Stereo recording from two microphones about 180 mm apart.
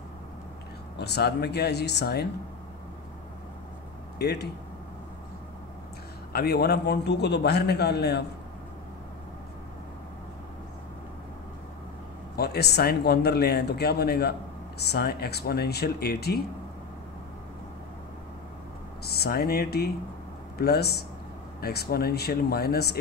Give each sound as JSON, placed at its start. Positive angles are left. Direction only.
{"t": 0.9, "sound": "speech", "side_deg": 65}
{"t": 4.2, "sound": "speech", "side_deg": 65}
{"t": 6.3, "sound": "speech", "side_deg": 65}
{"t": 12.4, "sound": "speech", "side_deg": 65}
{"t": 19.0, "sound": "speech", "side_deg": 60}